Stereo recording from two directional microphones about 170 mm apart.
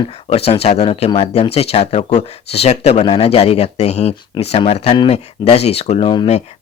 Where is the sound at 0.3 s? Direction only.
35° left (ahead or behind).